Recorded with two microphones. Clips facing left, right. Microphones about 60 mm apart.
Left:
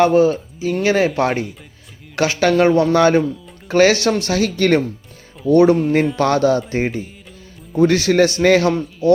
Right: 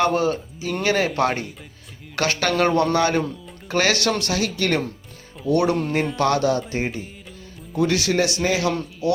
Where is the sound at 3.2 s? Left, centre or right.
Centre.